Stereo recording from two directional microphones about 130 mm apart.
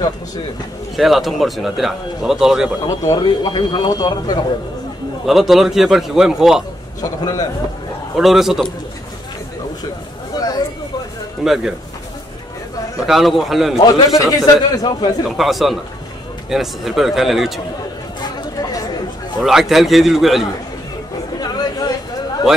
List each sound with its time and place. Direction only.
0.9 s speech: centre (ahead or behind)
2.8 s a man's voice: 25° left (ahead or behind)
3.2 s speech: 35° left (ahead or behind)
5.2 s speech: centre (ahead or behind)
7.0 s a man's voice: 30° left (ahead or behind)
8.2 s speech: centre (ahead or behind)
11.4 s speech: centre (ahead or behind)
13.0 s speech: centre (ahead or behind)
13.7 s a man's voice: 25° left (ahead or behind)
15.2 s speech: centre (ahead or behind)
18.2 s chatter: 30° left (ahead or behind)
19.4 s speech: centre (ahead or behind)
21.4 s chatter: 30° left (ahead or behind)